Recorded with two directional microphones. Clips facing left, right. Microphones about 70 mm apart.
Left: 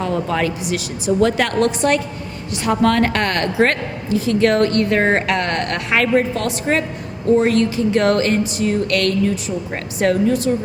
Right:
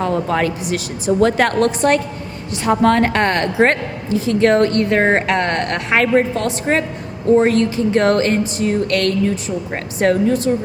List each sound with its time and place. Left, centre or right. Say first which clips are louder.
0.0 s speech: right 2 dB; right
2.6 s a woman's voice: right 2 dB; right